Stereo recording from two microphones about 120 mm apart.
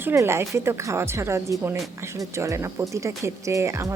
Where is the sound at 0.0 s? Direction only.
20° right (ahead or behind).